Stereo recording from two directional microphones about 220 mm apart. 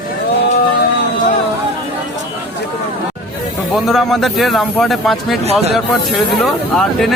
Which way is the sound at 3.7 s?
Centre (ahead or behind).